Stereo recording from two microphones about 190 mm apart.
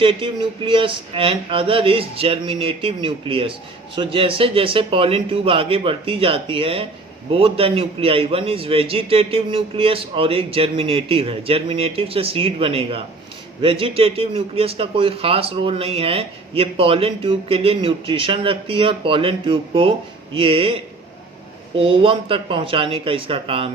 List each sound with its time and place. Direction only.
0.0 s speech: 25° right (ahead or behind)